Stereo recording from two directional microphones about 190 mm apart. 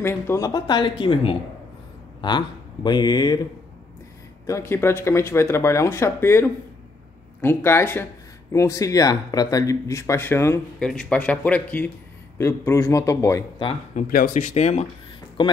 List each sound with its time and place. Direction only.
0.0 s speech: 15° left (ahead or behind)
4.5 s speech: 15° left (ahead or behind)
13.9 s speech: 50° left (ahead or behind)
15.4 s speech: 25° left (ahead or behind)